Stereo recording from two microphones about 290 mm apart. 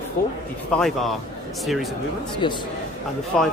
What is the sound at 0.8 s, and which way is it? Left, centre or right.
Speech, centre.